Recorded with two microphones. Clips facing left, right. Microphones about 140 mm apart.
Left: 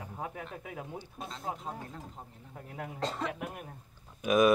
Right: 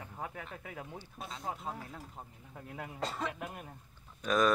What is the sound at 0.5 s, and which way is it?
Speech, 10° left (ahead or behind).